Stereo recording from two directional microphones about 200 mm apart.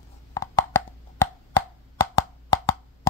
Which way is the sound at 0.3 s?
15° left (ahead or behind).